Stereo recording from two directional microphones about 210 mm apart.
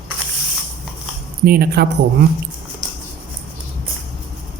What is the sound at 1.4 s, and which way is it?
Speech, 45° right (ahead or behind).